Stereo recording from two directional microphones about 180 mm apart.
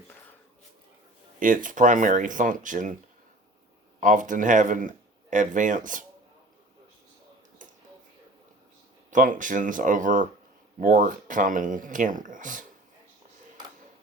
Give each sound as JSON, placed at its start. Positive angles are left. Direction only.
{"t": 1.4, "sound": "speech", "side_deg": -50}
{"t": 4.0, "sound": "speech", "side_deg": -45}
{"t": 9.0, "sound": "speech", "side_deg": -45}